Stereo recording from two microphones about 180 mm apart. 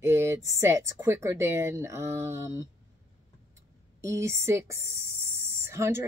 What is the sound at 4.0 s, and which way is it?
Speech, 15° right (ahead or behind).